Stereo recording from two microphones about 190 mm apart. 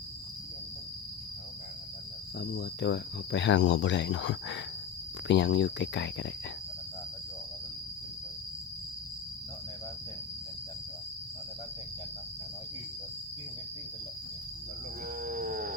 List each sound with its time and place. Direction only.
2.4 s speech: 60° left (ahead or behind)
15.2 s wild animals: 45° right (ahead or behind)